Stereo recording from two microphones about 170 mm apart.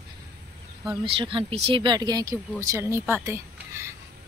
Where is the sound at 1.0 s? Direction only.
30° right (ahead or behind); by 3.9 s 15° right (ahead or behind).